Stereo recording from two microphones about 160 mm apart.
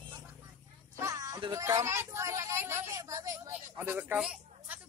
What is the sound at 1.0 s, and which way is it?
Speech, 20° right (ahead or behind).